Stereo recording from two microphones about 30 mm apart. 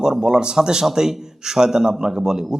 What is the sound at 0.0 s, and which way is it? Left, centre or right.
A man's voice, right.